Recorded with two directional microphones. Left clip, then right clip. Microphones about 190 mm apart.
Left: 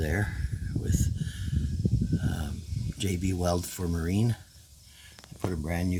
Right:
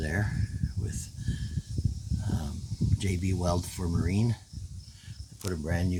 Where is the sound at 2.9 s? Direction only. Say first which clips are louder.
Left 4 dB; 10° left (ahead or behind).